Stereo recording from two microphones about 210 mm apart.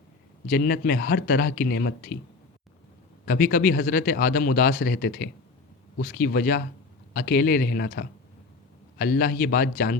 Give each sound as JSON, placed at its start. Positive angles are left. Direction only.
{"t": 0.4, "sound": "speech", "side_deg": 45}
{"t": 3.2, "sound": "speech", "side_deg": 45}